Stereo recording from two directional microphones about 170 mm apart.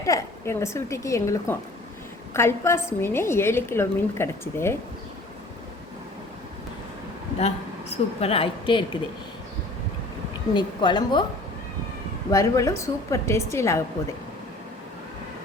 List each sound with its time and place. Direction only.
0.0 s a woman's voice: 20° left (ahead or behind)
7.3 s a woman's voice: 40° left (ahead or behind)
10.5 s a woman's voice: 25° left (ahead or behind)
12.3 s a woman's voice: 20° left (ahead or behind)